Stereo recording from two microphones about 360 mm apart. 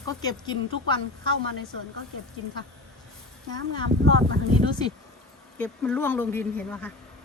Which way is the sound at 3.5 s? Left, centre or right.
Right.